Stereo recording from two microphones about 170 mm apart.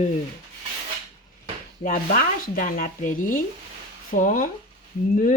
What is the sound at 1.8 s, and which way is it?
Speech, 50° left (ahead or behind).